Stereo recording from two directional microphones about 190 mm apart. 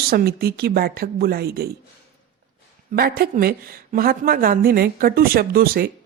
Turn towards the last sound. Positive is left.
turn(degrees=-55)  # may be behind; listen again after turning